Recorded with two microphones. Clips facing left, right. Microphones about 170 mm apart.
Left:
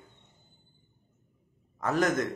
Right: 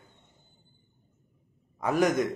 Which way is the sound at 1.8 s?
10° right (ahead or behind).